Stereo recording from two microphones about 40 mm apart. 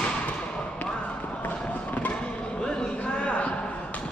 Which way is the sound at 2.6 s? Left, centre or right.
Left.